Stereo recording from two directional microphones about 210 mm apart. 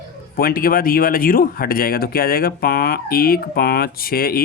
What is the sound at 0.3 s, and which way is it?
Speech, 45° left (ahead or behind).